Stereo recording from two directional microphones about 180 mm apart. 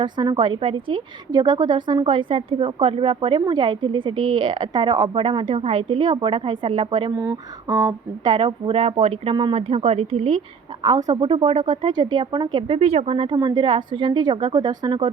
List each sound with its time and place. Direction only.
0.0 s a woman's voice: 25° right (ahead or behind)
7.2 s a woman's voice: 15° right (ahead or behind)